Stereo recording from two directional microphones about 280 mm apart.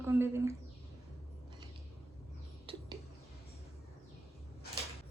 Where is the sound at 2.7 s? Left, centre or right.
Centre.